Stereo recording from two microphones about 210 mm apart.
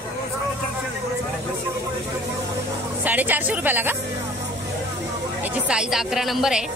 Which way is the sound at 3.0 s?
10° right (ahead or behind).